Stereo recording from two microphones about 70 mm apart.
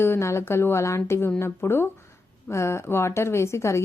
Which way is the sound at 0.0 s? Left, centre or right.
Left.